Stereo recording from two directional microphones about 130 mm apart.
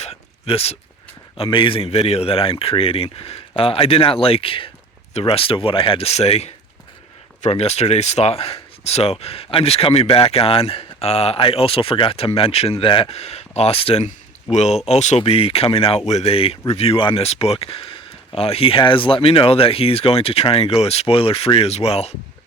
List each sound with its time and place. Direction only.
0.0 s a sound: 55° left (ahead or behind)
1.4 s speech: 40° left (ahead or behind); by 15.2 s 60° left (ahead or behind)
15.2 s speech: 45° left (ahead or behind)